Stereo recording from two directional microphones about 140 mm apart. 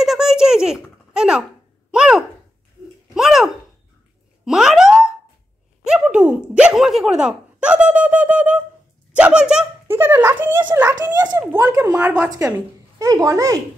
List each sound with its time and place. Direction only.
0.0 s a sound: 5° right (ahead or behind)
1.9 s speech: 5° right (ahead or behind)
3.2 s a sound: 5° right (ahead or behind)
5.9 s a child's voice: 5° right (ahead or behind)
11.0 s a child's voice: 30° right (ahead or behind)
11.9 s a child's voice: 10° right (ahead or behind)
12.3 s a child's voice: 25° right (ahead or behind)